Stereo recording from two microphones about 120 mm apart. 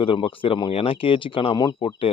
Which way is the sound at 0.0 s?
45° left (ahead or behind).